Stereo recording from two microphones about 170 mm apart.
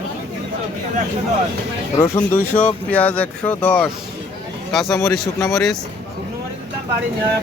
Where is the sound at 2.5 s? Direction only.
5° left (ahead or behind).